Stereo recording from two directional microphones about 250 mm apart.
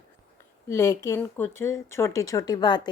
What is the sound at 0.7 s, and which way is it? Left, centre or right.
A woman's voice, centre.